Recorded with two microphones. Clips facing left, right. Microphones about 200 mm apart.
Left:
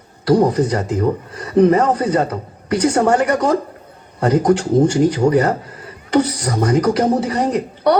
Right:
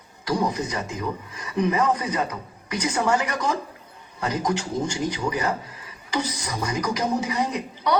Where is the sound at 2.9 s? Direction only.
60° left (ahead or behind).